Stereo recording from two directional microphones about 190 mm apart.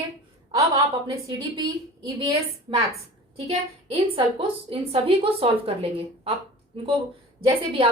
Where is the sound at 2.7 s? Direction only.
25° right (ahead or behind).